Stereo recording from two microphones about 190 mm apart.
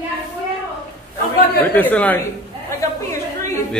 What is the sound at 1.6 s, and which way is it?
Speech, 10° left (ahead or behind).